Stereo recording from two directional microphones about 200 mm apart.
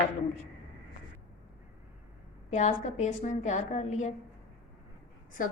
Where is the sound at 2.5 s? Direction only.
35° left (ahead or behind).